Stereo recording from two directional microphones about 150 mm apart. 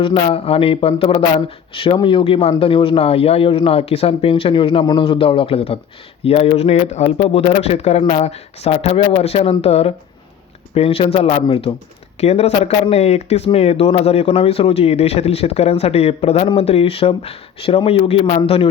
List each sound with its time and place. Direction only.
0.0 s speech: 35° left (ahead or behind)